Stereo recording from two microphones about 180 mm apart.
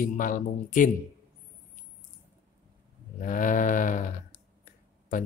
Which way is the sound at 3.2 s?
45° left (ahead or behind).